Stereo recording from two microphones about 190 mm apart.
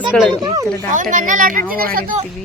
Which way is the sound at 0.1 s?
Centre (ahead or behind).